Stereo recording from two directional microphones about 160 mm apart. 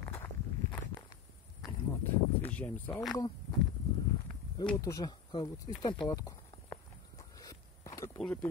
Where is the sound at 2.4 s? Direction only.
10° left (ahead or behind).